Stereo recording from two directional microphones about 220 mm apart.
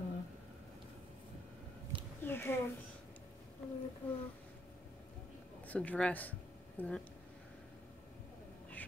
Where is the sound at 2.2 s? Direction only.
10° left (ahead or behind).